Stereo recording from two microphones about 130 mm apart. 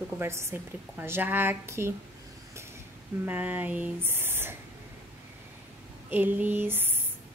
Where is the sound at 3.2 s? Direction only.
15° right (ahead or behind).